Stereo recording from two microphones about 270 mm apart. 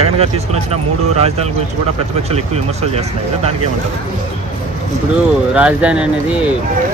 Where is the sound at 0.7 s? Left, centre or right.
Right.